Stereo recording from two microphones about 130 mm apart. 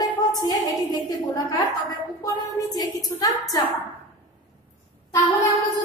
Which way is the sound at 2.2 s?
30° left (ahead or behind).